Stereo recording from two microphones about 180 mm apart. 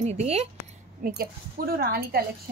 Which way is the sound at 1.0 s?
60° right (ahead or behind).